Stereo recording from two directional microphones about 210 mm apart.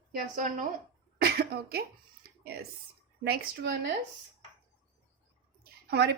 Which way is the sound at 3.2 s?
50° right (ahead or behind).